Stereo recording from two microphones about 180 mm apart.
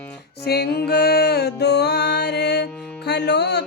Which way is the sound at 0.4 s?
60° left (ahead or behind).